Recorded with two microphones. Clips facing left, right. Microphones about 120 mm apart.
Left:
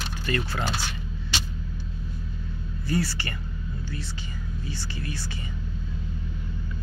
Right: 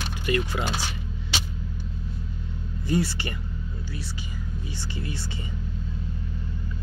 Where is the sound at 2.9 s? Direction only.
20° right (ahead or behind).